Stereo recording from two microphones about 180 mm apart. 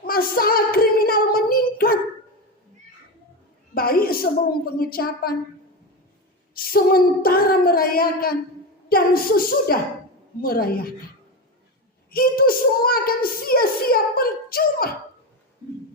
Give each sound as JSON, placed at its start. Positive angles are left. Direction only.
{"t": 0.0, "sound": "a sound", "side_deg": 55}
{"t": 3.8, "sound": "a child's voice", "side_deg": 55}
{"t": 6.5, "sound": "a child's voice", "side_deg": 55}
{"t": 12.1, "sound": "a child's voice", "side_deg": 55}